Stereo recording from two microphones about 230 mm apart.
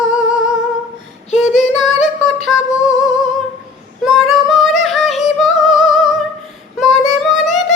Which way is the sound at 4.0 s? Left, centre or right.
Centre.